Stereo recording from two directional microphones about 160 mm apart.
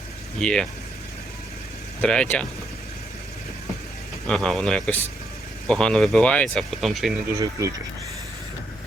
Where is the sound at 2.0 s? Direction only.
5° left (ahead or behind).